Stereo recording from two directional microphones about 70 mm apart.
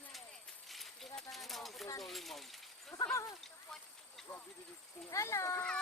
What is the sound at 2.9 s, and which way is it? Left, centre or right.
Speech, left.